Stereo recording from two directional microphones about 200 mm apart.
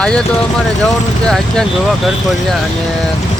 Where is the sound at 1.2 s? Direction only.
5° left (ahead or behind).